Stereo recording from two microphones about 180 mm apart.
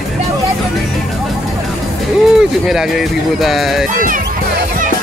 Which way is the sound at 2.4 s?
Centre (ahead or behind).